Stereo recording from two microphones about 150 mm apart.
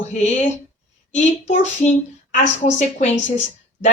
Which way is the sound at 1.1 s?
55° left (ahead or behind).